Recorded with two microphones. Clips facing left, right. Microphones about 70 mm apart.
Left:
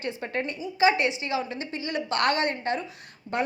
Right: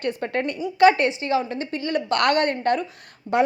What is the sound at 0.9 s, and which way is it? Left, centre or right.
A woman's voice, right.